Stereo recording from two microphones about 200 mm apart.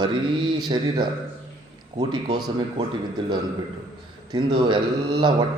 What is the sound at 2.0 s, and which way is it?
Speech, 20° right (ahead or behind).